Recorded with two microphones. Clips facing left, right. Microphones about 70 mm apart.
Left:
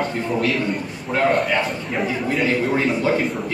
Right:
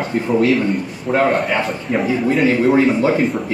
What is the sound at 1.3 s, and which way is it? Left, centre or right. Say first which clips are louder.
A man's voice: right 2 dB; centre.